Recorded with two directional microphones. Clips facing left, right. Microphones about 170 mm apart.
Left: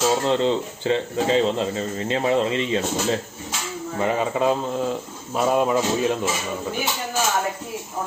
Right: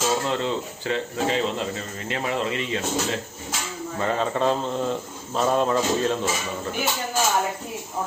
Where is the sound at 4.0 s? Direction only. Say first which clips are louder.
Left 2 dB; 10° left (ahead or behind).